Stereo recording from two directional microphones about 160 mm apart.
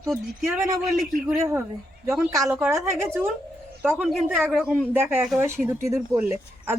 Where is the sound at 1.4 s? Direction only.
15° right (ahead or behind).